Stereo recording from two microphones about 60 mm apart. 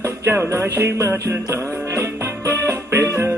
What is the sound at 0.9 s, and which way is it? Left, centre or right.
Music, right.